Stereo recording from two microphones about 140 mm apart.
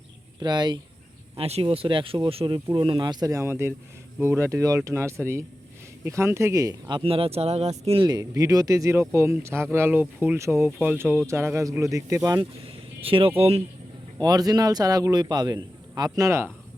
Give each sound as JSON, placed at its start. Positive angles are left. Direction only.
{"t": 0.3, "sound": "speech", "side_deg": -30}
{"t": 1.4, "sound": "a man's voice", "side_deg": -45}
{"t": 8.0, "sound": "a man's voice", "side_deg": -25}
{"t": 12.6, "sound": "speech", "side_deg": -40}
{"t": 14.2, "sound": "a man's voice", "side_deg": -25}